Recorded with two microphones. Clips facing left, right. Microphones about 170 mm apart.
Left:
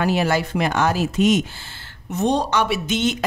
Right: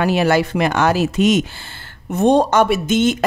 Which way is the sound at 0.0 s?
70° right (ahead or behind).